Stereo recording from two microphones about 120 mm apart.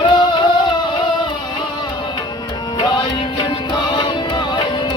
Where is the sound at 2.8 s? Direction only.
35° left (ahead or behind).